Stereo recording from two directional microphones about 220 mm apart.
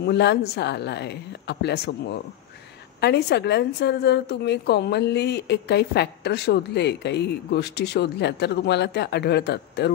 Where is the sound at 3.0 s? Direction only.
50° left (ahead or behind).